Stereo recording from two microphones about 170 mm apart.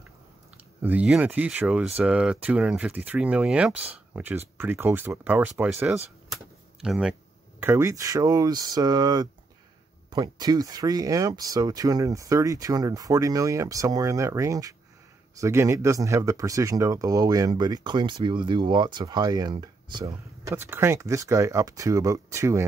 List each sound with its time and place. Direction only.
0.8 s speech: 10° right (ahead or behind)
7.6 s speech: 15° right (ahead or behind)
20.5 s speech: 15° right (ahead or behind)